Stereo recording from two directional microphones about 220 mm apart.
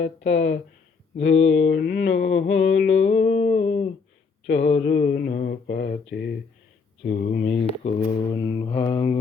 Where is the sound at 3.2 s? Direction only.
35° left (ahead or behind).